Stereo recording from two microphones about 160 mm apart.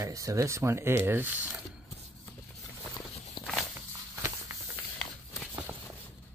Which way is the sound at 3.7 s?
15° right (ahead or behind).